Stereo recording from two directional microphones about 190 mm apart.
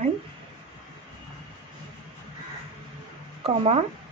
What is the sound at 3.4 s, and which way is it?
Speech, 30° right (ahead or behind).